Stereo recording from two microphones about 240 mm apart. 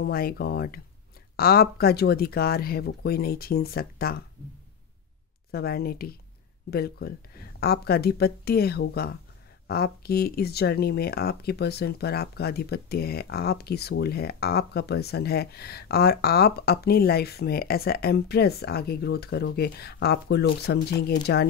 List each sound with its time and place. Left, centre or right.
0.0 s speech: left
5.5 s speech: left